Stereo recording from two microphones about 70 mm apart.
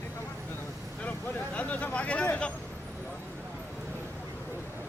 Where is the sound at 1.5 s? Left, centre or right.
Centre.